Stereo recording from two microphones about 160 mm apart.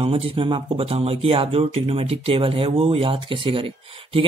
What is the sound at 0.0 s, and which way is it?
Speech, 35° right (ahead or behind).